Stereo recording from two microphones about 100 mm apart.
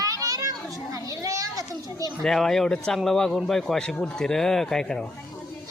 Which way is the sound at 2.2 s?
5° left (ahead or behind).